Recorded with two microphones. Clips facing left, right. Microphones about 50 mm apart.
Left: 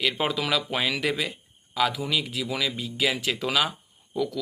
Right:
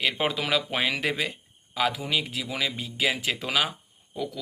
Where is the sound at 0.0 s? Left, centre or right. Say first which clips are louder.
Left 1 dB; right.